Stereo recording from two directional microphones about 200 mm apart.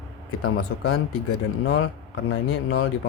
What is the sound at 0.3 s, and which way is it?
Speech, 90° left.